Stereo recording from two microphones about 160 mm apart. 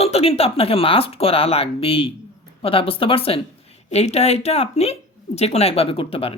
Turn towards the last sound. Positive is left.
turn(degrees=35)  # may be behind; listen again after turning